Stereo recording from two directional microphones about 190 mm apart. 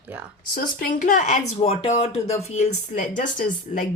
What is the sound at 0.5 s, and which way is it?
Speech, 45° left (ahead or behind).